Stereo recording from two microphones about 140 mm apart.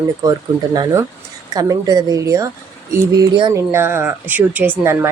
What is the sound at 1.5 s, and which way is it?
Speech, 25° right (ahead or behind).